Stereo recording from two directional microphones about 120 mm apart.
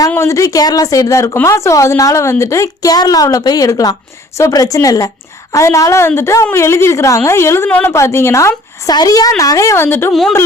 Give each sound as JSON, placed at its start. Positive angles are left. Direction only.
{"t": 0.1, "sound": "a woman's voice", "side_deg": 25}
{"t": 10.1, "sound": "speech", "side_deg": 0}